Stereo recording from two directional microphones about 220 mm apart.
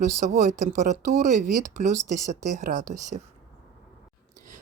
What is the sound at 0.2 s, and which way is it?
Speech, 35° right (ahead or behind).